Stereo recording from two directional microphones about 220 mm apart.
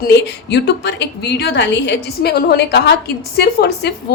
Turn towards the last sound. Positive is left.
turn(degrees=45)  # may be behind; listen again after turning